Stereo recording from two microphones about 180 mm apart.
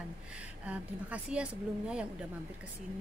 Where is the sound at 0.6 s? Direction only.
5° right (ahead or behind).